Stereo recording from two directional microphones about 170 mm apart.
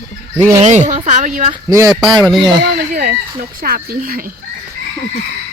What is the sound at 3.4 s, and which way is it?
Speech, 60° right (ahead or behind).